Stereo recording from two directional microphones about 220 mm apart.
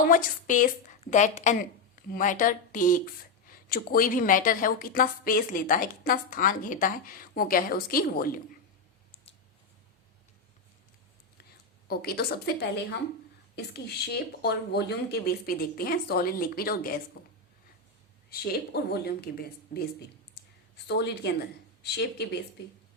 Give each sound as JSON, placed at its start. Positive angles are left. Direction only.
{"t": 0.0, "sound": "speech", "side_deg": 35}
{"t": 11.9, "sound": "speech", "side_deg": 45}